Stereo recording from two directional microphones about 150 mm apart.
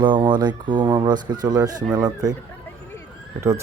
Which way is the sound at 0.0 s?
30° right (ahead or behind).